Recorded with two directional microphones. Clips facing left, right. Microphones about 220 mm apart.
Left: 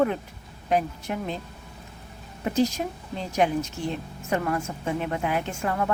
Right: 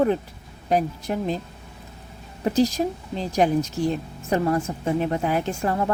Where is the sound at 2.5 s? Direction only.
35° right (ahead or behind).